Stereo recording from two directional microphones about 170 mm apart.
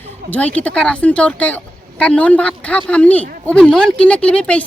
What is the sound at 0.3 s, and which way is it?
Speech, 10° left (ahead or behind).